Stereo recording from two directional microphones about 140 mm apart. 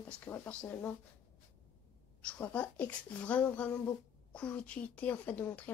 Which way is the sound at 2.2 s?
10° left (ahead or behind).